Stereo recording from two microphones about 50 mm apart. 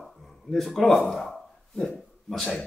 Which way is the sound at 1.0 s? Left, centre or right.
Centre.